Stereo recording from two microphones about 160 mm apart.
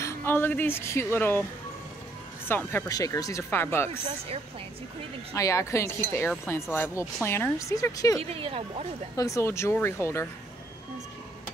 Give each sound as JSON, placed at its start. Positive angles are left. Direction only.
{"t": 0.0, "sound": "speech", "side_deg": 15}
{"t": 2.4, "sound": "speech", "side_deg": 15}
{"t": 5.3, "sound": "speech", "side_deg": 20}
{"t": 8.2, "sound": "speech", "side_deg": -35}
{"t": 9.1, "sound": "speech", "side_deg": 20}